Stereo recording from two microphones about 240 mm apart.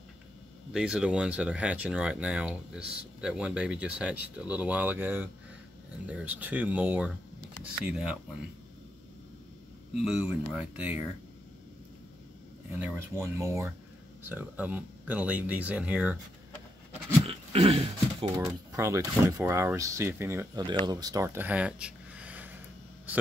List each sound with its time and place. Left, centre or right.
0.7 s speech: centre
9.9 s speech: centre
12.7 s speech: centre
17.3 s dog: right
18.4 s speech: centre